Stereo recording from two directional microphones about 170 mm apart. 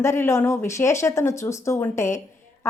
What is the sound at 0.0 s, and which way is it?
A woman's voice, 15° left (ahead or behind).